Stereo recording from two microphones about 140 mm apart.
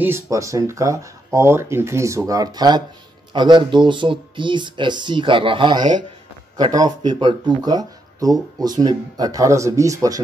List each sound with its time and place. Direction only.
0.0 s speech: 20° right (ahead or behind)